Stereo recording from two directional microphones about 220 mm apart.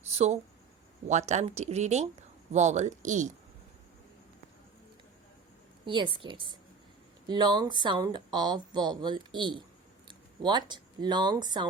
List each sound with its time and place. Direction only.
0.1 s a sound: 30° right (ahead or behind)
1.3 s speech: 30° right (ahead or behind)
5.8 s speech: 20° right (ahead or behind)